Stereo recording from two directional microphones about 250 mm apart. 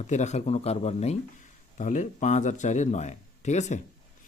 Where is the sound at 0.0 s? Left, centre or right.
Left.